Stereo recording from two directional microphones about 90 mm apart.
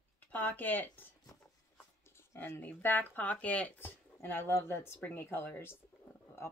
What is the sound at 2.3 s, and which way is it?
Speech, 25° left (ahead or behind).